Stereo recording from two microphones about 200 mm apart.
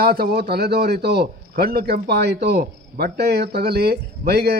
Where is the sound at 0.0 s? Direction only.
50° right (ahead or behind).